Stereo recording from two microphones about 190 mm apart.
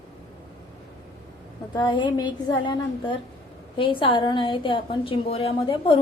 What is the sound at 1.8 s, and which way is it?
A woman's voice, 25° left (ahead or behind).